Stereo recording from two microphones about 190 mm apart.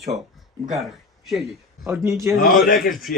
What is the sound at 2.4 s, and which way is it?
Speech, 45° left (ahead or behind).